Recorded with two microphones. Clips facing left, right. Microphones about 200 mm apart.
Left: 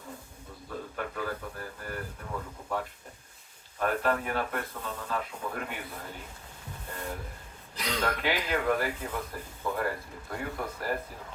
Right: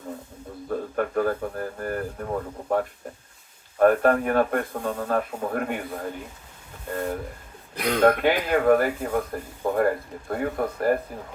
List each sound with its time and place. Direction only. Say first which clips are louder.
0.7 s speech: right 11 dB; 50° right (ahead or behind)
7.8 s speech: right 12 dB; 55° right (ahead or behind)